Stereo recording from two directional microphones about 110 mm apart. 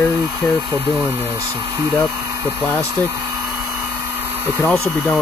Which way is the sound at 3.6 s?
25° right (ahead or behind).